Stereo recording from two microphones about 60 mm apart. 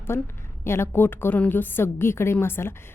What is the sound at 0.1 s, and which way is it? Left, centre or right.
A woman's voice, left.